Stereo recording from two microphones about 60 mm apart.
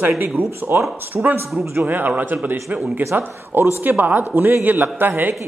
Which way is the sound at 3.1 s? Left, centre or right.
Right.